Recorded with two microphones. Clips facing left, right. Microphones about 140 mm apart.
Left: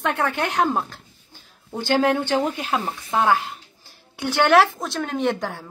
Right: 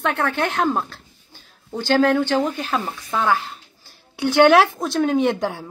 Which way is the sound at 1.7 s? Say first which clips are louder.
Right 3 dB; 20° left (ahead or behind).